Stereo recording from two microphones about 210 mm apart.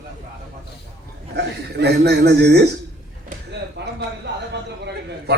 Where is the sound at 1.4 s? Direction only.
50° right (ahead or behind).